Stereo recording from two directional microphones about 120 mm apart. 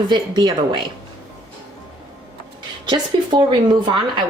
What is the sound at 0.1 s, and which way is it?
Speech, 40° right (ahead or behind).